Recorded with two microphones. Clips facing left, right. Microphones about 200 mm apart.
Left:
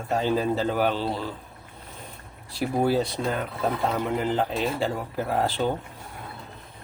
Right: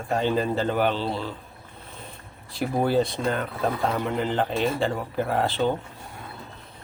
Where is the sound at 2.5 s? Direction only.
5° left (ahead or behind).